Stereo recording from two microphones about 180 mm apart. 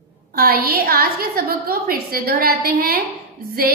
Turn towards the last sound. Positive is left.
turn(degrees=-55)  # may be behind; listen again after turning